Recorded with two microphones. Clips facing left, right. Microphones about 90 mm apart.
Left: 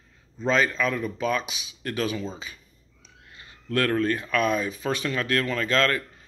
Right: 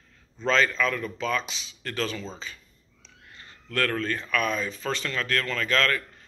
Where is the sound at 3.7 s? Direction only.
15° left (ahead or behind).